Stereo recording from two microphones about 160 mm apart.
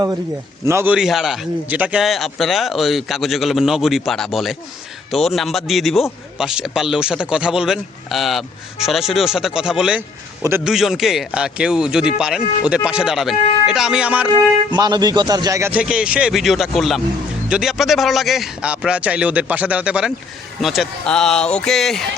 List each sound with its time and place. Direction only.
0.6 s speech: 15° right (ahead or behind)
0.9 s a man's voice: 5° right (ahead or behind)
14.7 s a man's voice: 25° right (ahead or behind); by 22.0 s centre (ahead or behind)